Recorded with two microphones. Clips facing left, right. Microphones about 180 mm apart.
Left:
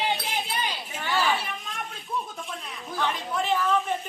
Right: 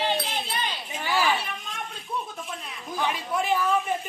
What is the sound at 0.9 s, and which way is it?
Speech, 10° right (ahead or behind).